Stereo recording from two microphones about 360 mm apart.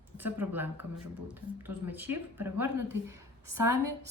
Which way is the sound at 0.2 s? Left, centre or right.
Centre.